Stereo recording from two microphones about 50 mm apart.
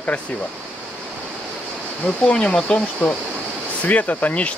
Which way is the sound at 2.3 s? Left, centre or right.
Centre.